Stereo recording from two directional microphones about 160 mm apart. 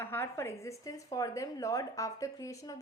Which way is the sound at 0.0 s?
15° left (ahead or behind).